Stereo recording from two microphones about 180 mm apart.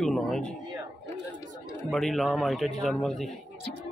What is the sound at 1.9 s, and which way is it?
A man's voice, centre (ahead or behind).